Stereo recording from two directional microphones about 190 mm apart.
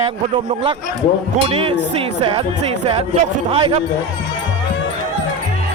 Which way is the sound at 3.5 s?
30° right (ahead or behind).